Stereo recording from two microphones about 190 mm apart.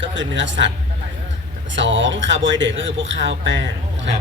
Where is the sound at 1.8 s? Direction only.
75° right (ahead or behind).